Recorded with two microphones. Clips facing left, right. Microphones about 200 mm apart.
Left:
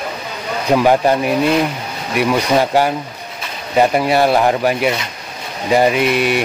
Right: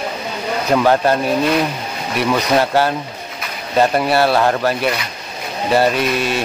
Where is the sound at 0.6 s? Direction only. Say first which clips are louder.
Left 2 dB; 10° left (ahead or behind).